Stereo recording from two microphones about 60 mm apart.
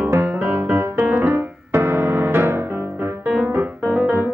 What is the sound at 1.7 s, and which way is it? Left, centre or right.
Music, right.